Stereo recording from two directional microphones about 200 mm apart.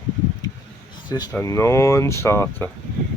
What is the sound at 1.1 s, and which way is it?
Speech, 20° left (ahead or behind).